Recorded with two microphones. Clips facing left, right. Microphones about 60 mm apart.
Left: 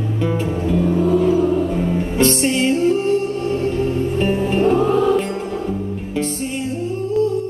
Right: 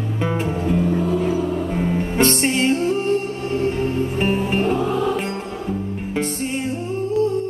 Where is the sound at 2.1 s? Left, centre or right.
Right.